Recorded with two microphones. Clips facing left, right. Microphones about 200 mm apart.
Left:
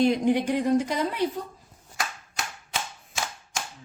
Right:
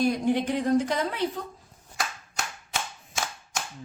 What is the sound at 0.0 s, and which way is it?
Speech, 20° left (ahead or behind).